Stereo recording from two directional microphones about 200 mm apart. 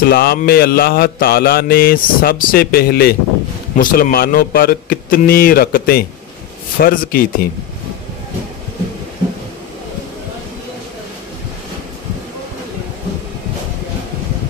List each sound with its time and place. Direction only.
0.0 s mantra: 50° left (ahead or behind)